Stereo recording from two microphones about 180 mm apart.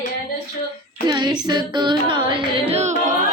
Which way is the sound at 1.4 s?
25° right (ahead or behind).